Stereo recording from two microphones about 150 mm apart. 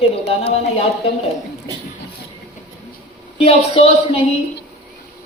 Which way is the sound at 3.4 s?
40° left (ahead or behind).